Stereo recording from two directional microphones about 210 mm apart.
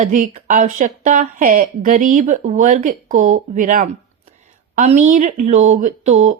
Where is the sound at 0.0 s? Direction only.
40° right (ahead or behind).